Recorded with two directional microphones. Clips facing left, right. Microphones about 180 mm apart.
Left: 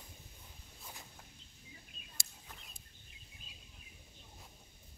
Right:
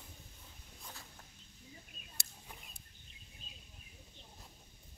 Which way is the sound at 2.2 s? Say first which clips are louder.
Right 1 dB; 60° right (ahead or behind).